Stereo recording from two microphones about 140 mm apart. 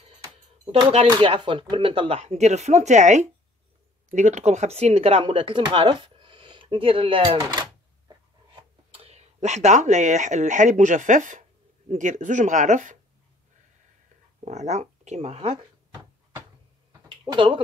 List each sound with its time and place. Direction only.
0.7 s speech: 45° right (ahead or behind)
5.2 s speech: 35° right (ahead or behind)
8.9 s speech: 50° right (ahead or behind)
14.4 s speech: 55° right (ahead or behind)
17.3 s speech: 35° right (ahead or behind)